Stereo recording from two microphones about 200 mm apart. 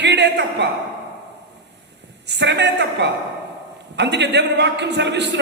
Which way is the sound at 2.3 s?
60° right (ahead or behind).